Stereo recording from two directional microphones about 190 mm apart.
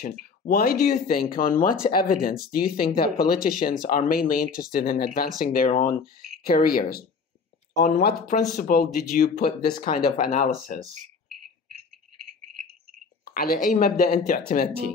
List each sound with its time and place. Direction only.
0.5 s speech: 55° left (ahead or behind)
13.2 s speech: 50° left (ahead or behind)